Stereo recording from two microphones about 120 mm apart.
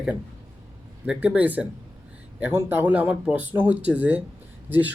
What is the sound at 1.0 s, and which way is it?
Speech, 10° right (ahead or behind).